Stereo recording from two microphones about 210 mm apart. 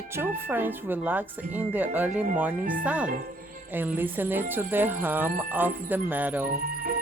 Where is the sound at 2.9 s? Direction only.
5° right (ahead or behind).